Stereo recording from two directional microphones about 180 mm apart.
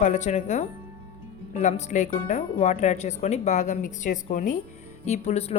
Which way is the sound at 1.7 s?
40° left (ahead or behind).